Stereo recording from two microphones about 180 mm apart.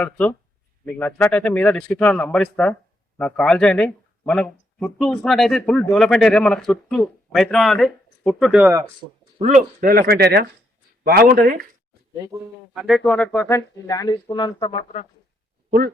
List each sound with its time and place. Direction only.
0.0 s speech: 10° left (ahead or behind)
9.4 s speech: 40° right (ahead or behind)
9.9 s speech: 55° right (ahead or behind)
12.7 s speech: centre (ahead or behind); by 15.0 s 30° left (ahead or behind)